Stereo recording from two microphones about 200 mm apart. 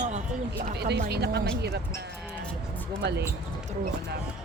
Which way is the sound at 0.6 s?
55° right (ahead or behind).